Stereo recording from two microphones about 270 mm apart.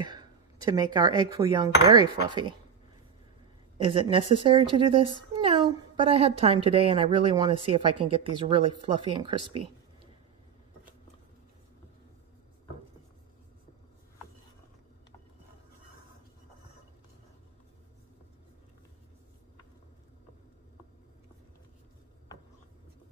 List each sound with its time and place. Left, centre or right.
0.0 s speech: centre
3.7 s a woman's voice: centre